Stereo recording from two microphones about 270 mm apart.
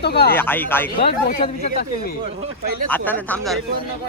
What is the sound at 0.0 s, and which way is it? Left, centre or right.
Speech, left.